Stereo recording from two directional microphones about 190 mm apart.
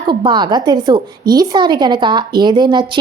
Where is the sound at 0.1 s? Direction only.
25° right (ahead or behind).